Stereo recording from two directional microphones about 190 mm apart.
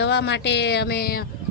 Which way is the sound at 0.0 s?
65° left (ahead or behind).